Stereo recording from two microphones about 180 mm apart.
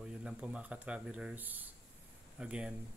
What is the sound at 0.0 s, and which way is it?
Speech, 5° right (ahead or behind).